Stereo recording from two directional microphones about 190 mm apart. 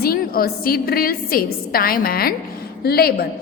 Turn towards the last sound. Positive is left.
turn(degrees=55)  # may be behind; listen again after turning